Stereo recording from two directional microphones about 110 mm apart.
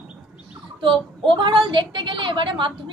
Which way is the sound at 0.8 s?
50° right (ahead or behind).